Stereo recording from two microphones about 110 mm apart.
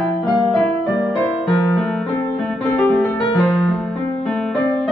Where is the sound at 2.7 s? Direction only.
20° left (ahead or behind).